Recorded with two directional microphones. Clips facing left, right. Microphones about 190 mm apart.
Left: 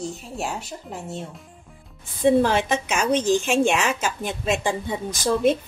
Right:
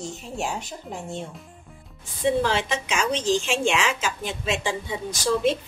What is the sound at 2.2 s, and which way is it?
A woman's voice, 50° left (ahead or behind).